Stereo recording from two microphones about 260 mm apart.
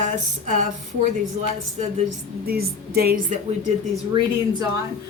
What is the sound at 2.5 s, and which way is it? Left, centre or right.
Speech, right.